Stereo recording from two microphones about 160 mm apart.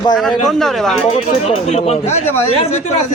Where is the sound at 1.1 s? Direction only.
40° left (ahead or behind).